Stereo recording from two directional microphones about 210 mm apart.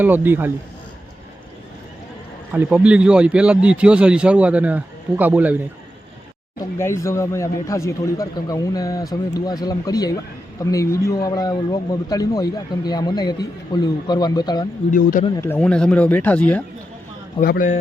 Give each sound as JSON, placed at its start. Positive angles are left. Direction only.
{"t": 0.0, "sound": "speech", "side_deg": -10}
{"t": 2.5, "sound": "a man's voice", "side_deg": -5}
{"t": 6.7, "sound": "a man's voice", "side_deg": 15}
{"t": 14.8, "sound": "speech", "side_deg": 40}
{"t": 15.4, "sound": "a man's voice", "side_deg": 10}
{"t": 17.4, "sound": "a man's voice", "side_deg": 40}